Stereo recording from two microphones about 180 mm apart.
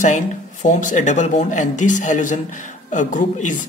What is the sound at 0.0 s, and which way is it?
Speech, 45° left (ahead or behind).